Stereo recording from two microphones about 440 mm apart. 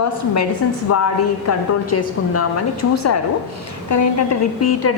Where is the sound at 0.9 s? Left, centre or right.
Left.